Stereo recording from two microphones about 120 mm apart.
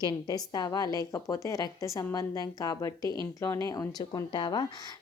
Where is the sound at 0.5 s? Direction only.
35° left (ahead or behind).